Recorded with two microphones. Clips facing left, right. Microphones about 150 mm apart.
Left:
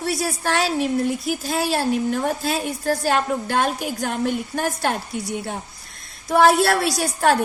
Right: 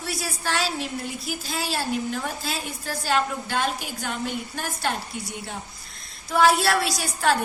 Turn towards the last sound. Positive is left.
turn(degrees=50)  # may be behind; listen again after turning